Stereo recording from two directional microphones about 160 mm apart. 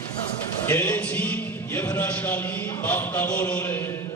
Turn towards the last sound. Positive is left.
turn(degrees=15)  # may be behind; listen again after turning